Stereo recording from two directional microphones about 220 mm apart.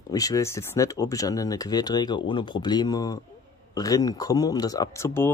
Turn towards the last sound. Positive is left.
turn(degrees=10)  # may be behind; listen again after turning